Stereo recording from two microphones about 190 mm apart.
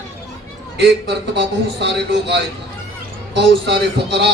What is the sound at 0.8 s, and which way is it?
A man's voice, 65° right (ahead or behind).